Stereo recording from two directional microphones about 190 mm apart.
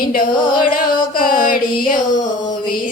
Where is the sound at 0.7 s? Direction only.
50° left (ahead or behind).